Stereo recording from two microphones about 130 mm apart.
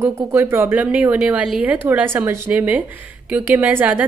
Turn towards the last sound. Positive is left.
turn(degrees=-15)  # may be behind; listen again after turning